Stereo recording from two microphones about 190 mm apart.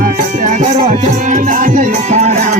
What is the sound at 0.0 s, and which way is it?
Music, 45° right (ahead or behind).